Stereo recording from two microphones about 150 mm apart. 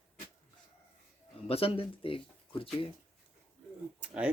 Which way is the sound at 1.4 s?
40° left (ahead or behind).